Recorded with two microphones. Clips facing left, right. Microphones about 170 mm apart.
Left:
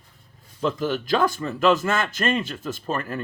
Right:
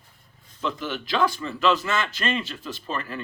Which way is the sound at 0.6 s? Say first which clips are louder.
Left 5 dB; 40° left (ahead or behind).